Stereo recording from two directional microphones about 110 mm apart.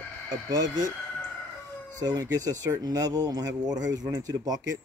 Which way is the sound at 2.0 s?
35° right (ahead or behind).